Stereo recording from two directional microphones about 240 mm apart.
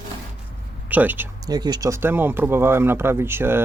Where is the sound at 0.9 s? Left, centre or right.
Centre.